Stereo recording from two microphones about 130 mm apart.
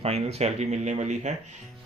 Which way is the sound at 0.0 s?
50° right (ahead or behind).